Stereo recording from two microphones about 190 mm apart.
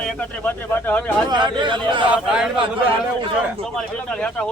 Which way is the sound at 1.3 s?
25° right (ahead or behind).